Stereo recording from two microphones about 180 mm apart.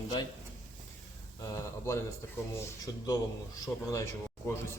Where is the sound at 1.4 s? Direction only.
15° left (ahead or behind).